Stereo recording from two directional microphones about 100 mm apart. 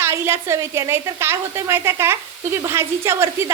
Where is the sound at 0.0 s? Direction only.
25° right (ahead or behind).